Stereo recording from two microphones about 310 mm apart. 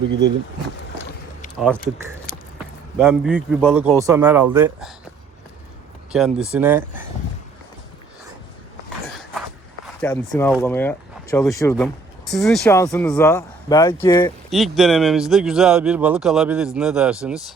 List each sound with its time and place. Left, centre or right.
1.5 s speech: centre
6.1 s speech: centre
9.8 s speech: centre
14.5 s speech: centre